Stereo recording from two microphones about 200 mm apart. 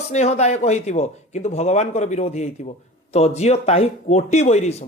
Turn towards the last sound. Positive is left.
turn(degrees=35)  # may be behind; listen again after turning